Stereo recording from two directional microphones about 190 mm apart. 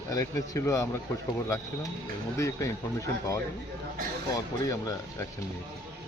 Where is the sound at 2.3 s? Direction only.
15° left (ahead or behind).